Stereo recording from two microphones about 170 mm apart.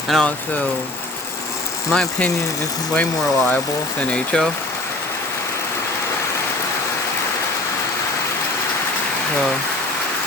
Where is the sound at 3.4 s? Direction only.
5° left (ahead or behind).